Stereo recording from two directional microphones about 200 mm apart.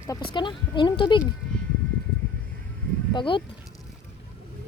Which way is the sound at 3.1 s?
25° left (ahead or behind).